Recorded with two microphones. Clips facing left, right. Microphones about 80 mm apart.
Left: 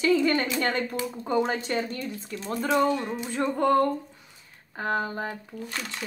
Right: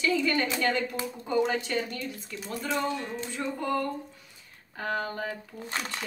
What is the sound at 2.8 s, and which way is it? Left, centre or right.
Speech, left.